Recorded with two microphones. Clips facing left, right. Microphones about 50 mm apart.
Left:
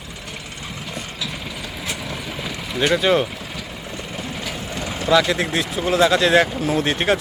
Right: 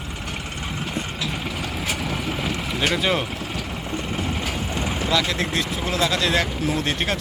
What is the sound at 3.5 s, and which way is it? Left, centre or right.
Vehicle, right.